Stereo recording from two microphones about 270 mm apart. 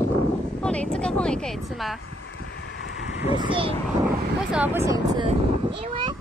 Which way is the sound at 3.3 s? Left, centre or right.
Centre.